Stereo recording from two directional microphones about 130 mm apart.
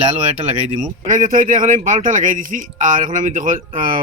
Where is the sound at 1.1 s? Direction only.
90° right.